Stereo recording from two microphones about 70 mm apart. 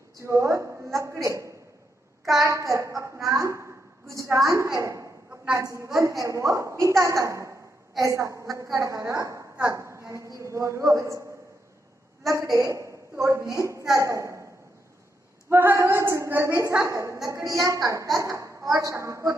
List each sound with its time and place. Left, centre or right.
0.2 s a woman's voice: right
0.9 s a sound: right
2.4 s a child's voice: right
3.3 s a sound: right
4.1 s a woman's voice: right
12.5 s a woman's voice: right
15.5 s a woman's voice: right